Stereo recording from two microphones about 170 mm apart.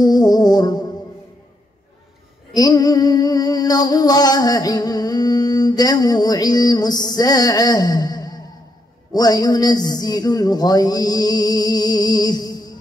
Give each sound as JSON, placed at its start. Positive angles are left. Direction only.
{"t": 0.0, "sound": "music", "side_deg": 25}
{"t": 2.5, "sound": "music", "side_deg": 25}